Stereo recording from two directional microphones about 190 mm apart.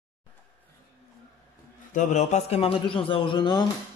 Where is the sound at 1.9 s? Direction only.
40° left (ahead or behind); by 3.6 s 25° left (ahead or behind).